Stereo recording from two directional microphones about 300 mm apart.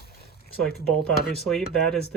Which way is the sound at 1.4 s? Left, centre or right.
Centre.